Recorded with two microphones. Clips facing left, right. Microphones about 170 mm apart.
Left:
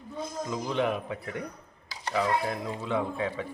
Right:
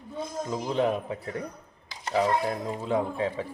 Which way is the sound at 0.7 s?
35° right (ahead or behind).